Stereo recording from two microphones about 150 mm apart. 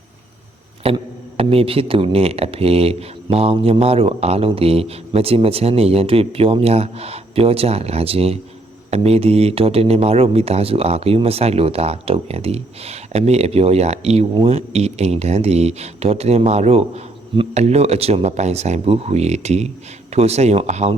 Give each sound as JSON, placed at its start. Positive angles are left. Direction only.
{"t": 0.8, "sound": "speech", "side_deg": -40}